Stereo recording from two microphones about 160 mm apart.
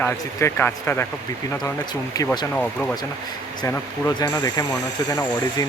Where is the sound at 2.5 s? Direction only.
10° left (ahead or behind).